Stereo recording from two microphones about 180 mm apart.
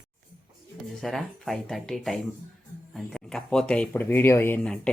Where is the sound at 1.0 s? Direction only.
Centre (ahead or behind).